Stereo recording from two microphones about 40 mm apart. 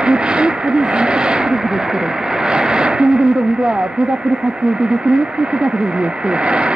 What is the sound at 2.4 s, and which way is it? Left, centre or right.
Radio, centre.